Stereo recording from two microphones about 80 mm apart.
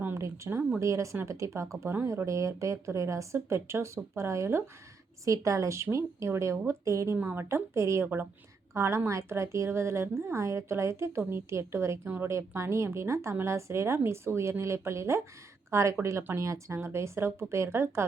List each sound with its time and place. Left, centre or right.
0.2 s a woman's voice: right
7.2 s a woman's voice: right
8.0 s a woman's voice: right
8.7 s a woman's voice: right